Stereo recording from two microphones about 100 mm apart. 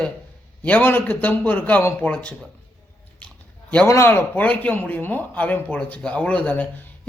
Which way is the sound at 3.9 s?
25° left (ahead or behind).